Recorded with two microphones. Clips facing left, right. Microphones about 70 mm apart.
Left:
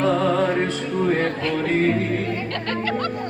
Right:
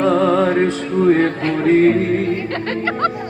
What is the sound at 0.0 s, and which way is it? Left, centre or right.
Music, right.